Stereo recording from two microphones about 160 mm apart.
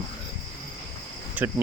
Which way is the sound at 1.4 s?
10° right (ahead or behind).